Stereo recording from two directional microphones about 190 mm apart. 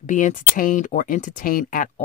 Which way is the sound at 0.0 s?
40° left (ahead or behind).